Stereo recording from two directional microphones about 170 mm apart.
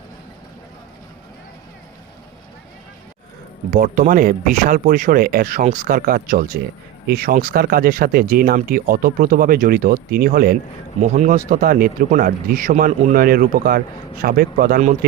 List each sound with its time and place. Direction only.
3.7 s speech: 55° right (ahead or behind)
11.0 s speech: 45° right (ahead or behind)